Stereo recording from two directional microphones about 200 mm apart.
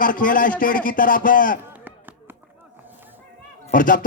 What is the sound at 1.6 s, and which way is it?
Chop, 10° right (ahead or behind).